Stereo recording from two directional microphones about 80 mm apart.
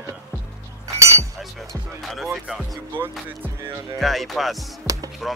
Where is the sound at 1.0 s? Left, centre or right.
Right.